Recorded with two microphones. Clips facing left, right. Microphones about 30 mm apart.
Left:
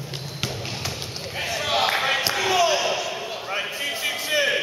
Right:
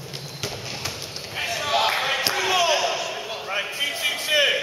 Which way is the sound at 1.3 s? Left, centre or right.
Centre.